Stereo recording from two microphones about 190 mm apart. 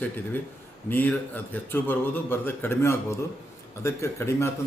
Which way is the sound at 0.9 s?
10° left (ahead or behind).